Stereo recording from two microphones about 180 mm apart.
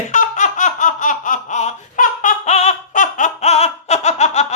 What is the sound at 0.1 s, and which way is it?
Laughter, 45° left (ahead or behind).